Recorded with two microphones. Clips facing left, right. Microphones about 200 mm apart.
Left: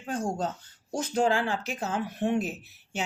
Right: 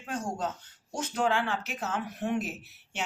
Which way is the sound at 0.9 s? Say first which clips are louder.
Left 3 dB; 35° left (ahead or behind).